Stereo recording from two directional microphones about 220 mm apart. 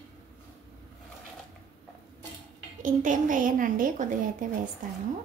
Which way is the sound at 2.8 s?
35° right (ahead or behind).